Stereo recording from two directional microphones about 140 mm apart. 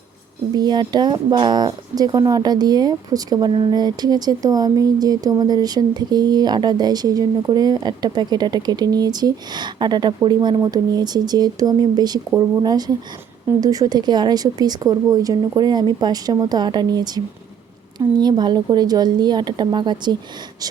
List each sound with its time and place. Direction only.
0.5 s a woman's voice: 30° right (ahead or behind)